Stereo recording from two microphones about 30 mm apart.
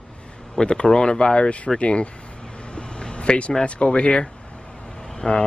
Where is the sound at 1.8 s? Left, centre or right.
Left.